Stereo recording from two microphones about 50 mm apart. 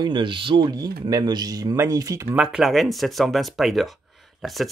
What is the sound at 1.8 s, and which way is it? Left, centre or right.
Speech, right.